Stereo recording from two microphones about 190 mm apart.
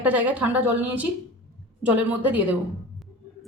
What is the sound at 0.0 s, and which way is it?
A woman's voice, 10° right (ahead or behind).